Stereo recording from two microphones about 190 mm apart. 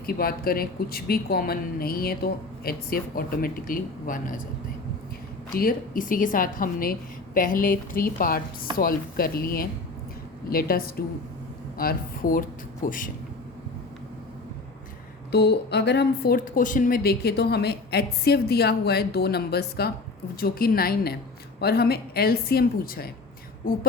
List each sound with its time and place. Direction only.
0.0 s a woman's voice: 50° left (ahead or behind)
5.5 s a woman's voice: 50° left (ahead or behind)
15.3 s a woman's voice: 60° left (ahead or behind)